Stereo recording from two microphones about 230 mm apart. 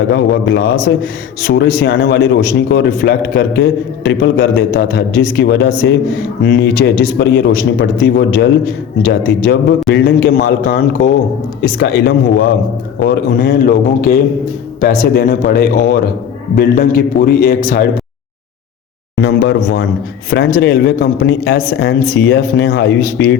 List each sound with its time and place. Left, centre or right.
0.1 s a man's voice: left
13.3 s a man's voice: left
19.1 s a man's voice: left